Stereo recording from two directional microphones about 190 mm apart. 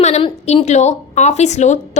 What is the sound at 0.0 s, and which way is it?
A woman's voice, 35° left (ahead or behind).